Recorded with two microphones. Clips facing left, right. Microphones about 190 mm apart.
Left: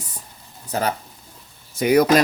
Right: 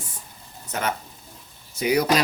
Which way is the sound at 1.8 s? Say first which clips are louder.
Left 5 dB; 50° left (ahead or behind).